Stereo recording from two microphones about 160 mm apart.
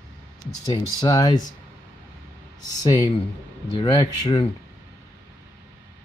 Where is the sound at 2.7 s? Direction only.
20° left (ahead or behind).